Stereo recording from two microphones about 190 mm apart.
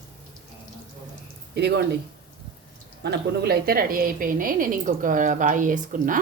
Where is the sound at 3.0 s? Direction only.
60° right (ahead or behind).